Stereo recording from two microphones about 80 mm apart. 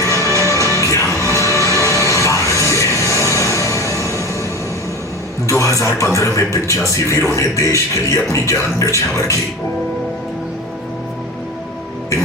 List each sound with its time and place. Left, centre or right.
0.0 s music: left
5.5 s a man's voice: left